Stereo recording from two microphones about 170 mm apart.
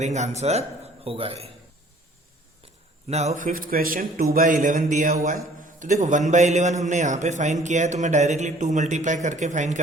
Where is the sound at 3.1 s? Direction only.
40° right (ahead or behind).